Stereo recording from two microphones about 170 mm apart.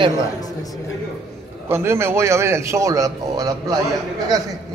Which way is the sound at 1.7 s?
15° right (ahead or behind).